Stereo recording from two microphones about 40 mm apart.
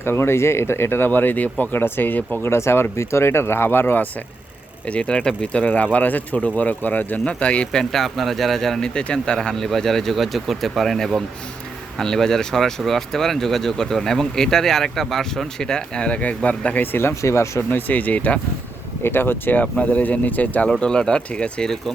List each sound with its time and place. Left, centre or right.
0.0 s speech: left
2.4 s speech: left
4.9 s speech: left
5.6 s speech: left
7.3 s speech: left
7.7 s speech: centre
8.0 s speech: centre
8.8 s speech: centre
16.7 s speech: left
19.0 s speech: left
19.8 s speech: left
20.8 s speech: left